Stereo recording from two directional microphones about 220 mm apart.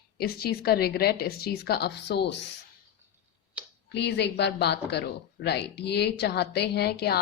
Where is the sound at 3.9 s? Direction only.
50° left (ahead or behind).